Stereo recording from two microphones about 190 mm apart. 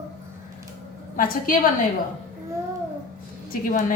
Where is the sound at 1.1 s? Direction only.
45° left (ahead or behind).